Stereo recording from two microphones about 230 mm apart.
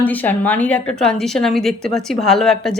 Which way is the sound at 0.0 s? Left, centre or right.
Centre.